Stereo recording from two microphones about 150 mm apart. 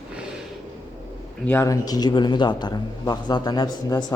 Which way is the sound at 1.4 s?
20° left (ahead or behind).